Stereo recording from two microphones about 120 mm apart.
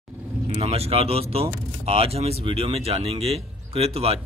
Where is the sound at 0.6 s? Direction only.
55° right (ahead or behind).